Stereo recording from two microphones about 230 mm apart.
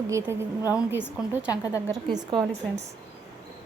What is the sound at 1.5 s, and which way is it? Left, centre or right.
Speech, centre.